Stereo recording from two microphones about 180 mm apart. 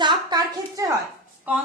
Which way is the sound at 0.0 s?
25° right (ahead or behind).